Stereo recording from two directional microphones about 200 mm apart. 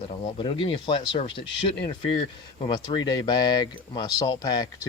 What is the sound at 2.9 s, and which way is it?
Speech, 20° left (ahead or behind).